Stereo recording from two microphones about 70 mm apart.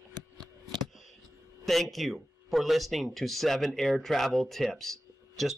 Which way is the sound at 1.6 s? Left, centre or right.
Centre.